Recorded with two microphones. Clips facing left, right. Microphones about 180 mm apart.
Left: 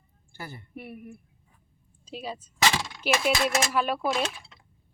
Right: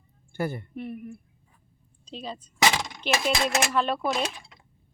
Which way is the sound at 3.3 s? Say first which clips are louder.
Even; 20° right (ahead or behind).